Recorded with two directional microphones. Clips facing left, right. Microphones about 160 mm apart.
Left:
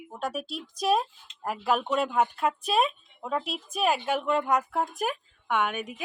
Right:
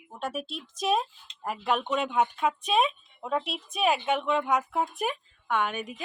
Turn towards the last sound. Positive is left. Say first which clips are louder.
# left 1 dB
turn(degrees=5)  # may be behind; listen again after turning